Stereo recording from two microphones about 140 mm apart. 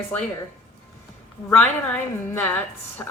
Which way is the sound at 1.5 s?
10° left (ahead or behind).